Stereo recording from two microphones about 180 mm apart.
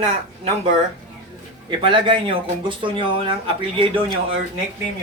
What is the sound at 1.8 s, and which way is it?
Speech, 25° right (ahead or behind).